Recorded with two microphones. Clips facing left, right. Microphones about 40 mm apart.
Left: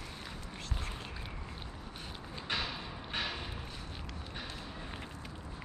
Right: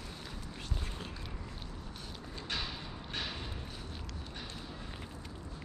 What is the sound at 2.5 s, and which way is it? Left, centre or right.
Thump, centre.